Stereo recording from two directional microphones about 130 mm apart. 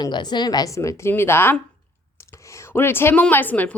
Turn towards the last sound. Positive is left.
turn(degrees=15)  # may be behind; listen again after turning